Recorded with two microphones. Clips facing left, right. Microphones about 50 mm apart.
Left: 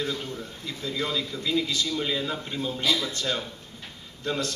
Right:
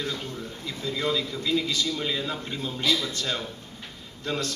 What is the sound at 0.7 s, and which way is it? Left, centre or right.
A man's voice, centre.